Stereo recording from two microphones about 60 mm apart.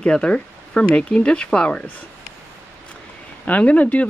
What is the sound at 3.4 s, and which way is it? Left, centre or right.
Speech, left.